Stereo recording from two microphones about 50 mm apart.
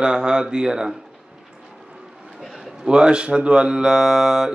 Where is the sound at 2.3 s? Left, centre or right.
Centre.